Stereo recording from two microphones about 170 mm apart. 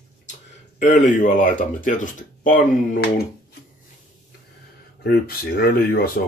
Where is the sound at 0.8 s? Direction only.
45° left (ahead or behind).